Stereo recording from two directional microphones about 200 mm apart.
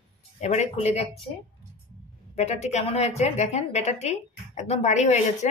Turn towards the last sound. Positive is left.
turn(degrees=35)  # may be behind; listen again after turning